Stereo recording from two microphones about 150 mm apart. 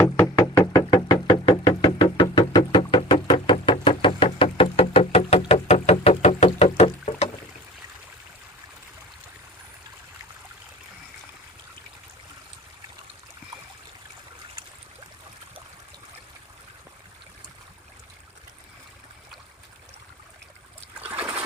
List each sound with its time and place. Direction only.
0.0 s knock: 15° left (ahead or behind)
0.6 s knock: 25° left (ahead or behind); by 7.3 s 45° left (ahead or behind)
21.1 s a sound: 10° right (ahead or behind)